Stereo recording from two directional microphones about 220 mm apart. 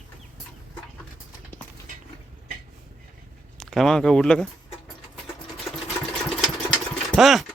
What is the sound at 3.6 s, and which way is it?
Speech, centre (ahead or behind).